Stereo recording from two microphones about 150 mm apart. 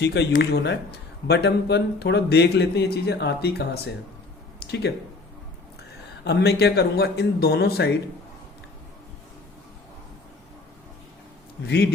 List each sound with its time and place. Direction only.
0.1 s speech: 90° left
4.6 s speech: 90° left
6.2 s speech: 90° left
11.6 s speech: 90° left